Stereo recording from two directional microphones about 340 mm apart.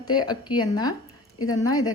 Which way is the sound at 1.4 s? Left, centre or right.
Left.